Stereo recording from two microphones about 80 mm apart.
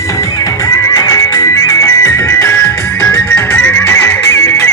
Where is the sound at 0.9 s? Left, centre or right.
Left.